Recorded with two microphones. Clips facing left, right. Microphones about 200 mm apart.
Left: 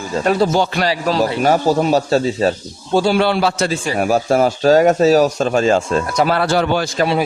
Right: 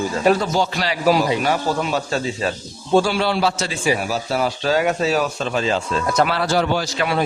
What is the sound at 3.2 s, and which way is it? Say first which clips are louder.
Speech: left 4 dB; 60° left (ahead or behind).